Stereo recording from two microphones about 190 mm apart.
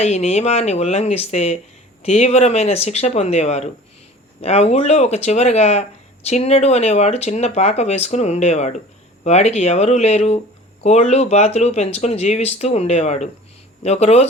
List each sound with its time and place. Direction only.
0.0 s speech: 35° left (ahead or behind)